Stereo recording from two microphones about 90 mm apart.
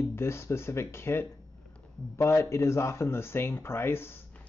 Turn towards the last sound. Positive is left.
turn(degrees=25)  # may be behind; listen again after turning